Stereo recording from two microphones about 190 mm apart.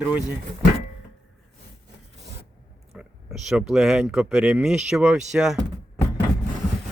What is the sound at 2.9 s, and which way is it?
Speech, 5° right (ahead or behind).